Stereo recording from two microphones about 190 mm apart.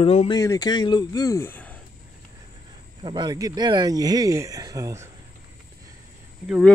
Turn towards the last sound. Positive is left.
turn(degrees=-5)  # may be behind; listen again after turning